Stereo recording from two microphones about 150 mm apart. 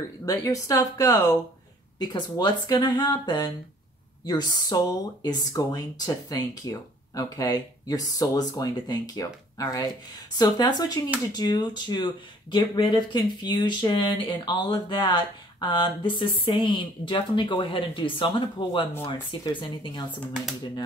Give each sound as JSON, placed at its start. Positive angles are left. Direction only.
{"t": 0.2, "sound": "speech", "side_deg": 20}